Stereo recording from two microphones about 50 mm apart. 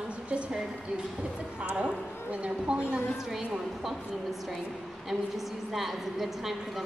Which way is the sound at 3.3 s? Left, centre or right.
Centre.